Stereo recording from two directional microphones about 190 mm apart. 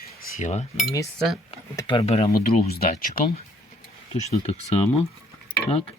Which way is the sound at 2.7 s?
50° left (ahead or behind).